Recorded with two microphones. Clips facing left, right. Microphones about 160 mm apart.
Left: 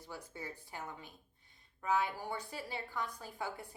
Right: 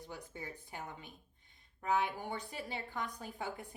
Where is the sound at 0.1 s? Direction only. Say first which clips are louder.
Left 2 dB; 20° right (ahead or behind).